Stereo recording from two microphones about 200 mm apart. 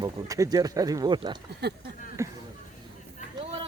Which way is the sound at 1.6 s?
55° right (ahead or behind).